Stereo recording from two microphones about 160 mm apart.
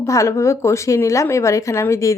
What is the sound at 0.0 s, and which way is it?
Speech, 20° left (ahead or behind).